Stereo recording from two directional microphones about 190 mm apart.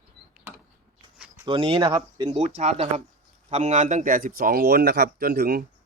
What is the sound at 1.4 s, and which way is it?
Speech, 25° right (ahead or behind).